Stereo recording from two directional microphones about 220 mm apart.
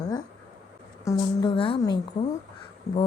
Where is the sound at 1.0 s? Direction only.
20° left (ahead or behind).